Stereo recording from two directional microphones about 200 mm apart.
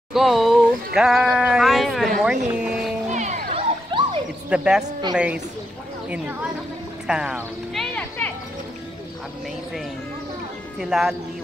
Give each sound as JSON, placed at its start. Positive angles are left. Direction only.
{"t": 0.1, "sound": "speech", "side_deg": 0}
{"t": 2.5, "sound": "music", "side_deg": -5}
{"t": 3.1, "sound": "music", "side_deg": -35}
{"t": 3.9, "sound": "dog", "side_deg": -25}
{"t": 4.5, "sound": "a man's voice", "side_deg": -5}
{"t": 7.1, "sound": "a sound", "side_deg": -5}
{"t": 10.8, "sound": "a man's voice", "side_deg": 0}